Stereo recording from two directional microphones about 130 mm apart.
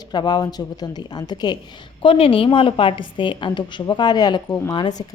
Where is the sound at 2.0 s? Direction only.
45° left (ahead or behind).